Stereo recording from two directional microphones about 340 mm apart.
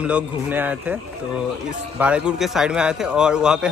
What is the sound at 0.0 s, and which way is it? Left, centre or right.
Speech, centre.